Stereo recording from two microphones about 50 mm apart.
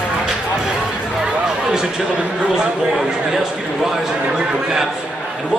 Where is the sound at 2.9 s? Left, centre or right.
Centre.